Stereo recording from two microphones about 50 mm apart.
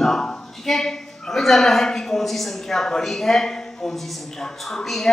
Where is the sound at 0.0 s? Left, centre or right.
Centre.